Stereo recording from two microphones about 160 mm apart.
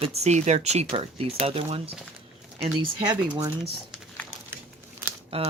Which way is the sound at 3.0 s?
25° right (ahead or behind).